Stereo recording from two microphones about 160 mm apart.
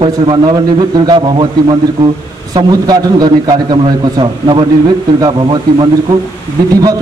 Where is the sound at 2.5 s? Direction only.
25° right (ahead or behind).